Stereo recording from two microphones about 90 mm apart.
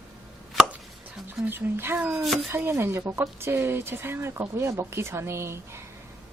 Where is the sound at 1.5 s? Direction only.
25° right (ahead or behind).